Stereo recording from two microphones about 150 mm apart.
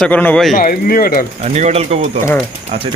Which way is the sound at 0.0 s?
10° left (ahead or behind).